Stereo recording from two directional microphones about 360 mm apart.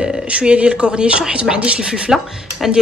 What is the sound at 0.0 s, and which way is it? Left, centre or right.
A woman's voice, centre.